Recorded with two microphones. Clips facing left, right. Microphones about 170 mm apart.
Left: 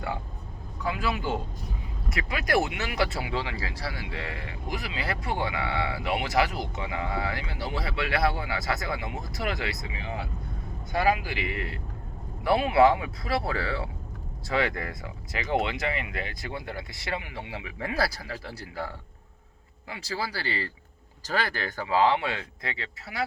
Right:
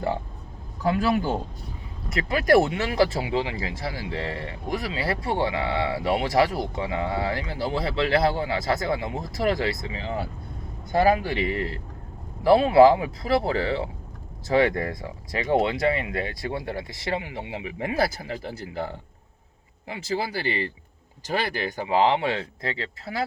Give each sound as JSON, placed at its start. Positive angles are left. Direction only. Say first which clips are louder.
{"t": 2.3, "sound": "a man's voice", "louder": "right 7 dB", "side_deg": -35}